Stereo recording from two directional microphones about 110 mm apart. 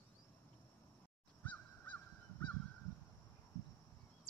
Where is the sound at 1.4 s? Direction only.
15° left (ahead or behind).